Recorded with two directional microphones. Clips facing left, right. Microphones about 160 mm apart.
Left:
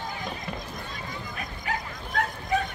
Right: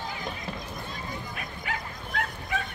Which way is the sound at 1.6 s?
40° left (ahead or behind).